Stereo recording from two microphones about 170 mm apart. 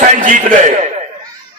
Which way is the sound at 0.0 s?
50° right (ahead or behind).